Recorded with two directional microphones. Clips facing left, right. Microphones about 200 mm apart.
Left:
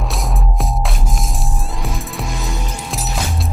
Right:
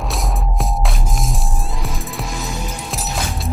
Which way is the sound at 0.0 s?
Centre (ahead or behind).